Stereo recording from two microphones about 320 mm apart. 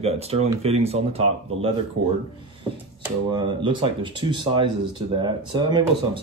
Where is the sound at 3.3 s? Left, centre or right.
Centre.